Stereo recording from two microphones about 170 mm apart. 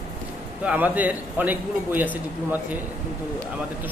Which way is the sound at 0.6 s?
10° right (ahead or behind).